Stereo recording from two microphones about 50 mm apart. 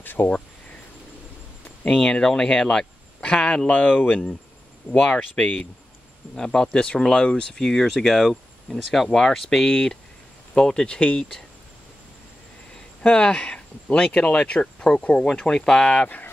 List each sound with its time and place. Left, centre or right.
0.0 s speech: left
2.0 s speech: centre
6.3 s speech: centre
13.0 s speech: left